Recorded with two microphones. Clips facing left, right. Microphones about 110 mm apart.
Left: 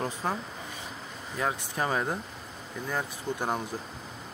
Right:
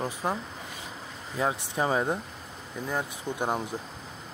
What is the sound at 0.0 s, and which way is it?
Speech, 10° right (ahead or behind).